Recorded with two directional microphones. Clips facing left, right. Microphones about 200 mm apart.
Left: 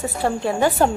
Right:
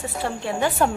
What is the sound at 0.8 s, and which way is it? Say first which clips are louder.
Speech: left 2 dB; 35° left (ahead or behind).